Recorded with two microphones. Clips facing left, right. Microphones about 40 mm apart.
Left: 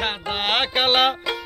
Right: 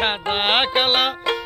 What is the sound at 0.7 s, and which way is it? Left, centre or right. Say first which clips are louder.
Music: even; centre.